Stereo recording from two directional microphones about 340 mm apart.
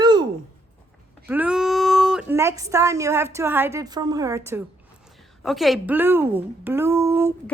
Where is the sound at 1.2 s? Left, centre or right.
Centre.